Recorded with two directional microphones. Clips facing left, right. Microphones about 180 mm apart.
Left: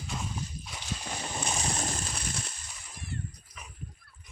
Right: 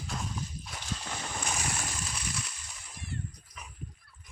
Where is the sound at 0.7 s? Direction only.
15° left (ahead or behind); by 2.0 s 40° left (ahead or behind).